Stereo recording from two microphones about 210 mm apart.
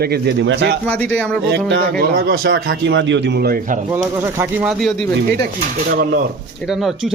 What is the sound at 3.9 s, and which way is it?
Speech, 10° right (ahead or behind).